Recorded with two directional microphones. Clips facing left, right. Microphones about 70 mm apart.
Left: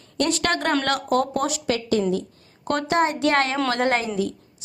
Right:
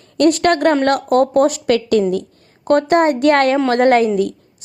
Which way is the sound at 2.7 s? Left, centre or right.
Right.